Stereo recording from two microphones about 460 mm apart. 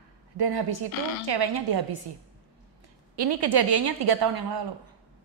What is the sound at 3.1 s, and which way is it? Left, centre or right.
A woman's voice, right.